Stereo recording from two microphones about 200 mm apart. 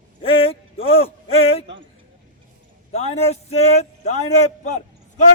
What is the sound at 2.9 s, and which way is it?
A man's voice, 30° left (ahead or behind).